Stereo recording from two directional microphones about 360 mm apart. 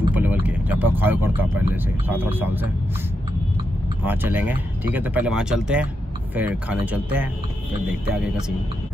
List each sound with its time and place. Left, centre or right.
0.0 s speech: centre
4.0 s speech: centre